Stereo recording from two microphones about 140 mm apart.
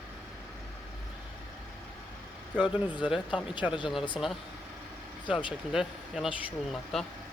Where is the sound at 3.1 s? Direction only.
35° left (ahead or behind).